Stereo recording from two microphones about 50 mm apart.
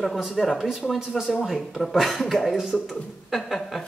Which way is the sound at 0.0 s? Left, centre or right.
Centre.